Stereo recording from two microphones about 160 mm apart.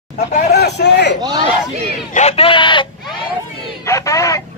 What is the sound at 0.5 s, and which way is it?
Speech, 90° left.